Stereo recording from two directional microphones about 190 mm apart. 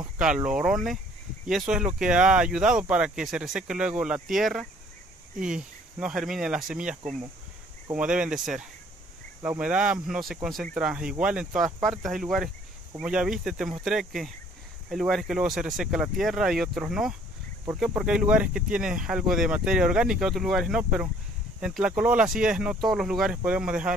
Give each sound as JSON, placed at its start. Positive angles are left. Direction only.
{"t": 0.2, "sound": "speech", "side_deg": -5}